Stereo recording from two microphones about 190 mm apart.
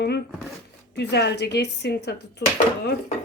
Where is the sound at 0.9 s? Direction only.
65° left (ahead or behind).